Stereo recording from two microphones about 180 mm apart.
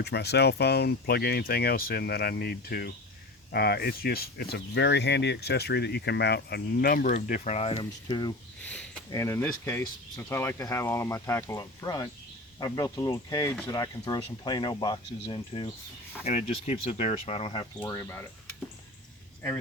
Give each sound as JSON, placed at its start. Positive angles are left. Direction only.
{"t": 0.0, "sound": "speech", "side_deg": 65}
{"t": 8.6, "sound": "a sound", "side_deg": 5}
{"t": 9.1, "sound": "speech", "side_deg": 15}
{"t": 16.2, "sound": "speech", "side_deg": 40}